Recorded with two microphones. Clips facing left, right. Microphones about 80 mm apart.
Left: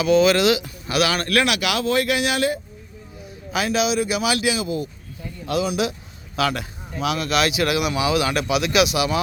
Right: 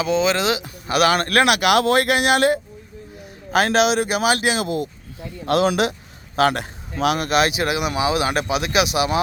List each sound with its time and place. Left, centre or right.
0.0 s speech: right
5.5 s speech: right
6.3 s speech: right